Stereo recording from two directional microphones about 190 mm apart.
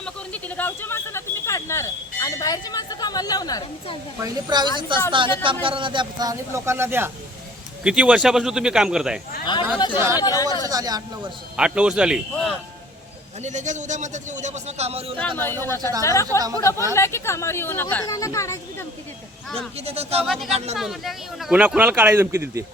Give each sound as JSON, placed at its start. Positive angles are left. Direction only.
{"t": 0.0, "sound": "speech", "side_deg": 10}
{"t": 4.2, "sound": "a man's voice", "side_deg": -20}
{"t": 9.7, "sound": "speech", "side_deg": 25}
{"t": 10.7, "sound": "speech", "side_deg": -20}
{"t": 11.5, "sound": "a man's voice", "side_deg": -5}
{"t": 13.4, "sound": "a man's voice", "side_deg": -40}
{"t": 15.4, "sound": "speech", "side_deg": 10}
{"t": 19.8, "sound": "a man's voice", "side_deg": -35}
{"t": 20.2, "sound": "a man's voice", "side_deg": 0}
{"t": 20.5, "sound": "a man's voice", "side_deg": -35}
{"t": 20.7, "sound": "speech", "side_deg": 0}